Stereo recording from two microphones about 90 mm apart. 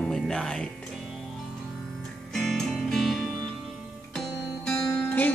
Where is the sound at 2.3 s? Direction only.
5° left (ahead or behind).